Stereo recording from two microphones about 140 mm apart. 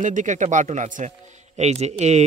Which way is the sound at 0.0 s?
65° right (ahead or behind).